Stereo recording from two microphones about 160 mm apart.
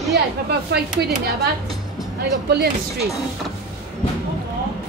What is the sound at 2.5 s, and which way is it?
Speech, 80° right.